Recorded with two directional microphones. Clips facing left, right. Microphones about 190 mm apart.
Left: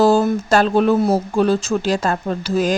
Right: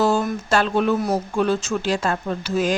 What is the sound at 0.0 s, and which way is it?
Speech, 30° left (ahead or behind).